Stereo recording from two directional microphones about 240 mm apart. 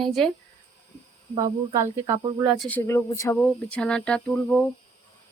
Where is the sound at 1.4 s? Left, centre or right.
Centre.